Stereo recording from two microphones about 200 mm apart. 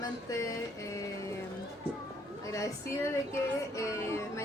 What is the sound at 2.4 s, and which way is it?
Child singing, 15° left (ahead or behind).